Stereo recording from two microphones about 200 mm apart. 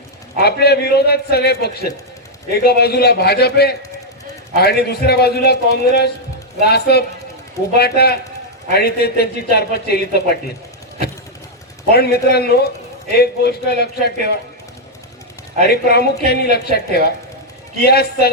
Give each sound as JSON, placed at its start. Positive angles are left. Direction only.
{"t": 0.3, "sound": "a man's voice", "side_deg": 55}
{"t": 11.9, "sound": "a man's voice", "side_deg": 55}
{"t": 15.6, "sound": "a man's voice", "side_deg": 55}